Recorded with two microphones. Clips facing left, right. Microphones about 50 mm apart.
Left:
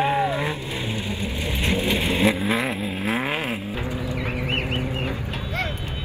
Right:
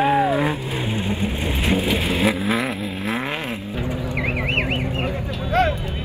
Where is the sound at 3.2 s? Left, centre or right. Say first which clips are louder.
Left 1 dB; left.